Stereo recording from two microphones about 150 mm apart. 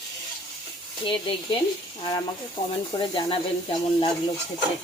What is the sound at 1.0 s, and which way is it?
Speech, 35° left (ahead or behind).